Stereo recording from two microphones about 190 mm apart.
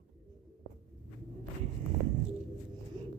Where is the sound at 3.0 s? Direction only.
25° right (ahead or behind).